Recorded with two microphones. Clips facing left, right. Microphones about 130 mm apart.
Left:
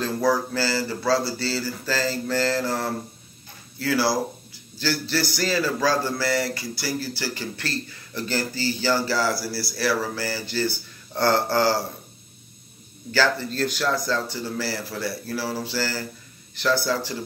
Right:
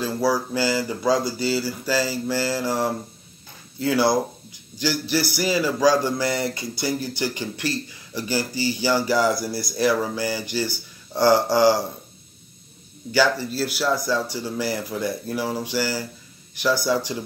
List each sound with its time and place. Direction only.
0.0 s a man's voice: 10° right (ahead or behind)
13.1 s a man's voice: 10° right (ahead or behind)